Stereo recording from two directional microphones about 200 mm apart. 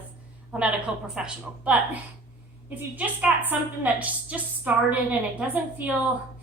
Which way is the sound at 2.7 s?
5° right (ahead or behind).